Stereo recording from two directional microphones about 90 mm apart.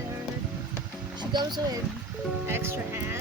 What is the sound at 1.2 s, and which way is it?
Speech, 55° right (ahead or behind).